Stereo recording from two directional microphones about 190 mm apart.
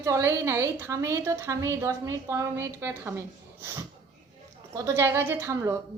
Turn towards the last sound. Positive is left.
turn(degrees=-15)  # may be behind; listen again after turning